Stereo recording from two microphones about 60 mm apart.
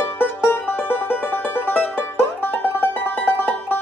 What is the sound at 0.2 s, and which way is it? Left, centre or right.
Music, left.